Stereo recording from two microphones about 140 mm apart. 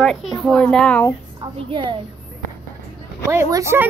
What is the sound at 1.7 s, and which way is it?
Speech, 35° right (ahead or behind).